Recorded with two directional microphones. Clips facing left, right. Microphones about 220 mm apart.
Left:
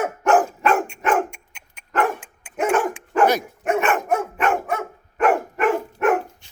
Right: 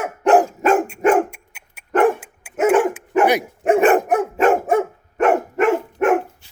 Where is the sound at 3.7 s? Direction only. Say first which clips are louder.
Right 7 dB; 35° right (ahead or behind).